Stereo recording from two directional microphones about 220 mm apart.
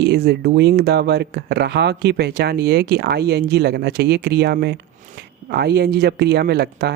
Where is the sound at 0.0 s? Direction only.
45° right (ahead or behind).